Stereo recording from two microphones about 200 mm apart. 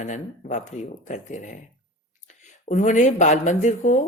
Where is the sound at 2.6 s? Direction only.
35° left (ahead or behind).